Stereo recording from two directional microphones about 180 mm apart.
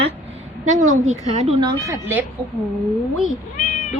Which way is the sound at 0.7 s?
45° right (ahead or behind).